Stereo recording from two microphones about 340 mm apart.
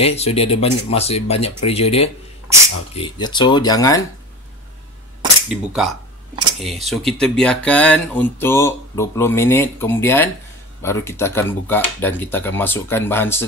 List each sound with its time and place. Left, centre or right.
0.0 s speech: centre
5.5 s speech: centre